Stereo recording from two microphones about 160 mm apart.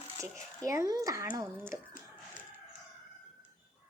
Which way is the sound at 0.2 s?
20° right (ahead or behind).